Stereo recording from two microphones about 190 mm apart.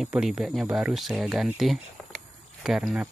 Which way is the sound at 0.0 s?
5° right (ahead or behind).